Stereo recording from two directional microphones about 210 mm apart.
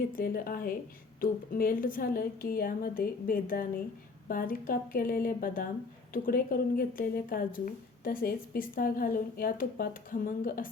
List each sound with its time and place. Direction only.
0.1 s a woman's voice: 40° left (ahead or behind)